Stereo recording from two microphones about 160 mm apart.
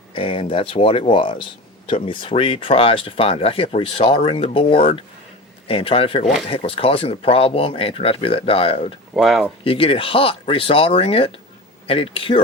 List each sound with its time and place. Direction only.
0.1 s speech: 35° left (ahead or behind)
9.1 s speech: centre (ahead or behind)
9.6 s speech: 35° left (ahead or behind)